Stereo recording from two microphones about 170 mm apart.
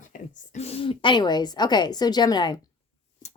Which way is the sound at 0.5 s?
40° left (ahead or behind).